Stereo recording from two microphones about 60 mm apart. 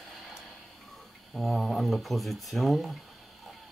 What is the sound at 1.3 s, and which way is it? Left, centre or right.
Speech, centre.